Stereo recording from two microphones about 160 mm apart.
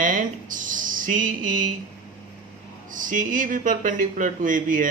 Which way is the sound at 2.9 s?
55° right (ahead or behind).